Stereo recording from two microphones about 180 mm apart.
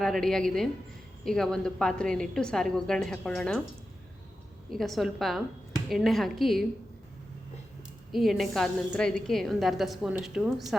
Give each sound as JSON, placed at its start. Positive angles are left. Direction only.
{"t": 0.0, "sound": "a woman's voice", "side_deg": 0}
{"t": 4.7, "sound": "a woman's voice", "side_deg": 0}
{"t": 8.1, "sound": "a woman's voice", "side_deg": 0}